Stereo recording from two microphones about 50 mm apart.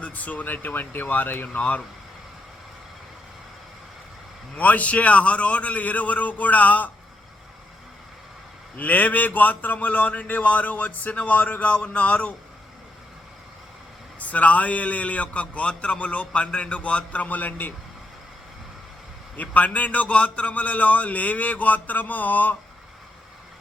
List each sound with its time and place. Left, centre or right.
0.0 s speech: left
4.5 s a man's voice: left
8.7 s a man's voice: left
14.2 s a man's voice: left
19.4 s speech: left